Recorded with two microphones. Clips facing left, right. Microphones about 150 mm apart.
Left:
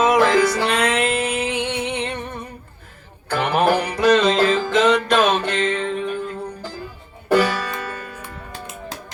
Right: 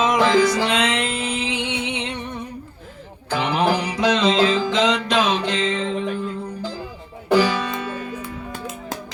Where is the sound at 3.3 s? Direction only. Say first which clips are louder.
Left 2 dB; 55° left (ahead or behind).